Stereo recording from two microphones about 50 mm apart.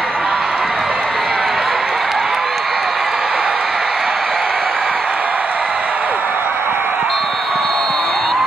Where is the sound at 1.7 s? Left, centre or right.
Centre.